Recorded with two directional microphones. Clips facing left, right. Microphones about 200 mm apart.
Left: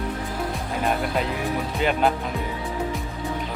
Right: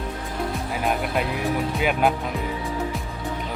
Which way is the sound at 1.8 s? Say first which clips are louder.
Left 1 dB; 5° right (ahead or behind).